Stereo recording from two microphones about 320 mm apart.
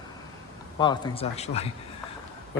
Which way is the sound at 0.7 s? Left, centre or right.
Centre.